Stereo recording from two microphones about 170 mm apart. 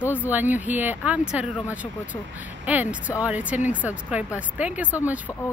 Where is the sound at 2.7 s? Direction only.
10° right (ahead or behind).